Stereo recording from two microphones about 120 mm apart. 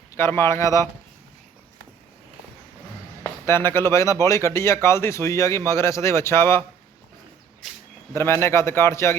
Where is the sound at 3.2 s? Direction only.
20° left (ahead or behind).